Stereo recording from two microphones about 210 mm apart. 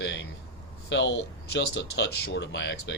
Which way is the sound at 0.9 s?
55° left (ahead or behind).